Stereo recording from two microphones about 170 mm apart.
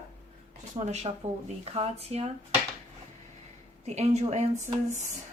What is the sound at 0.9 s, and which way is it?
Speech, 40° right (ahead or behind).